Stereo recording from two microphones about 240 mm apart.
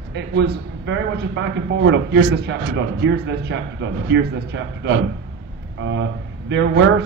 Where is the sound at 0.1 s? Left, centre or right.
Right.